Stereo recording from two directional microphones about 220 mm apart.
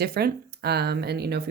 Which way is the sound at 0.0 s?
45° right (ahead or behind).